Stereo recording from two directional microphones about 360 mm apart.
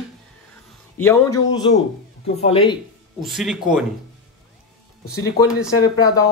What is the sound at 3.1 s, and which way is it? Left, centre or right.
Speech, centre.